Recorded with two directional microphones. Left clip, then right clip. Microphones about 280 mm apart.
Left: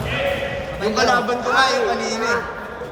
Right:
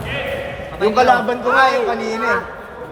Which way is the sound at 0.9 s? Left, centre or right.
Right.